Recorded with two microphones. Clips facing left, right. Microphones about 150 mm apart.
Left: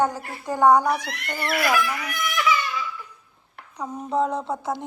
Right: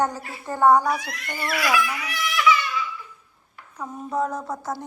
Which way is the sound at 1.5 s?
50° left (ahead or behind).